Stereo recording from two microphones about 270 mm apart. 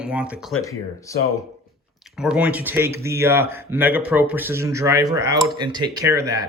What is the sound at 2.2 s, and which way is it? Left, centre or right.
Speech, centre.